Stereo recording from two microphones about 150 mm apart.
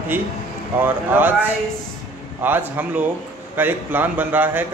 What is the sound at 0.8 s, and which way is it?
A man's voice, 15° right (ahead or behind).